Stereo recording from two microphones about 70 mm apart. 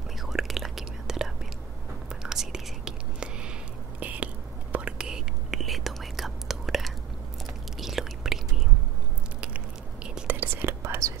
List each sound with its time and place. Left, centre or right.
0.2 s whispering: centre
4.0 s a sound: right
4.7 s whispering: centre
10.2 s whispering: right